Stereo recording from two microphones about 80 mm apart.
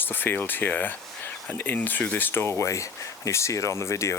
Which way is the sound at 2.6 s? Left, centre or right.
Left.